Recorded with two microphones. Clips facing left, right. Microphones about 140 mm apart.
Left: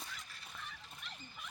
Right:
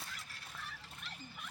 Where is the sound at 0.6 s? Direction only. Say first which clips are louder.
Right 1 dB; centre (ahead or behind).